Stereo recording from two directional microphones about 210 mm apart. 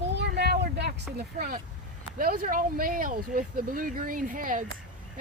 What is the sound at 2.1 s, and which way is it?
Speech, 40° right (ahead or behind).